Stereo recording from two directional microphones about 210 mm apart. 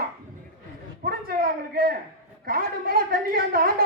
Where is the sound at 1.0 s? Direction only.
45° right (ahead or behind).